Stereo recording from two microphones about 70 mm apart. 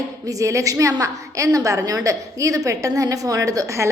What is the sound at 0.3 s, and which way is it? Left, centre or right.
A woman's voice, right.